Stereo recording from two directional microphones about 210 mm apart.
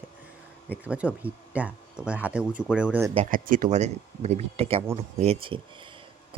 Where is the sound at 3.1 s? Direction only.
35° right (ahead or behind).